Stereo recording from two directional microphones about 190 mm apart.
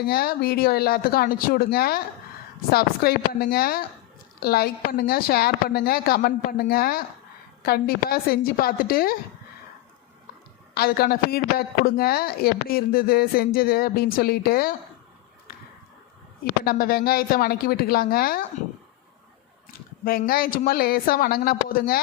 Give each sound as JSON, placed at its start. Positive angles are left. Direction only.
{"t": 0.1, "sound": "speech", "side_deg": 55}
{"t": 10.8, "sound": "speech", "side_deg": 55}
{"t": 16.4, "sound": "speech", "side_deg": 55}
{"t": 20.1, "sound": "speech", "side_deg": 50}